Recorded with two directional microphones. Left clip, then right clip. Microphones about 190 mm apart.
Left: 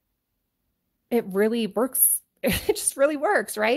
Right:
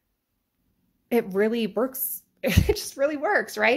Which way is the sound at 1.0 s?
30° left (ahead or behind).